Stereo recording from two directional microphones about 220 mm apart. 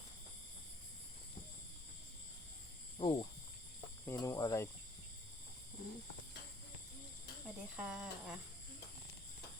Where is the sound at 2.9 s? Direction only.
20° left (ahead or behind).